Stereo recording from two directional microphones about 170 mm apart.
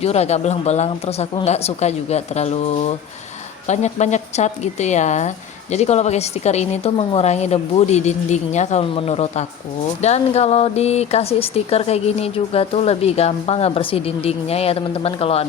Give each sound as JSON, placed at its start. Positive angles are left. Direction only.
{"t": 0.0, "sound": "a woman's voice", "side_deg": 40}